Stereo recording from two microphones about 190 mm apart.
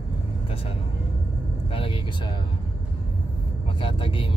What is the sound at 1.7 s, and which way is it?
Speech, 30° left (ahead or behind).